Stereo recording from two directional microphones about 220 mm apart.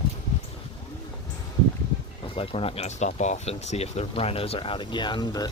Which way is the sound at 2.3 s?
25° left (ahead or behind).